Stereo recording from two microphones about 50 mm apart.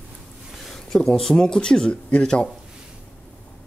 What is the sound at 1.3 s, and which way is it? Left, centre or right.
Speech, centre.